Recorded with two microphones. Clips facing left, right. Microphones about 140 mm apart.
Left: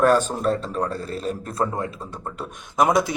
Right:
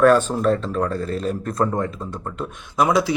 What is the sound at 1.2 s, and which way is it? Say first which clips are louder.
Speech: right 3 dB; 40° right (ahead or behind).